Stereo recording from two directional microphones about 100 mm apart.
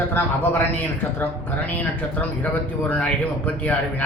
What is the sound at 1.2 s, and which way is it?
Speech, 15° left (ahead or behind).